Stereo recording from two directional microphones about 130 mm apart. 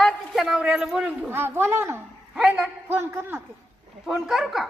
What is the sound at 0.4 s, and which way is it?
Speech, 5° right (ahead or behind).